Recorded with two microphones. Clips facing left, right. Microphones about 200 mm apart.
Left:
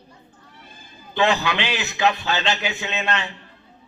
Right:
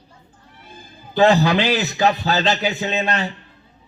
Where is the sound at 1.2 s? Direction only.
35° right (ahead or behind).